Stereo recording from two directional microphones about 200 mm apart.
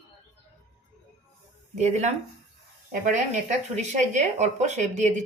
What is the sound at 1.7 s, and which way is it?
Speech, 35° right (ahead or behind).